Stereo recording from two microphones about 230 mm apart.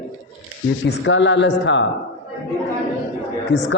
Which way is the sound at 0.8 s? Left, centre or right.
Left.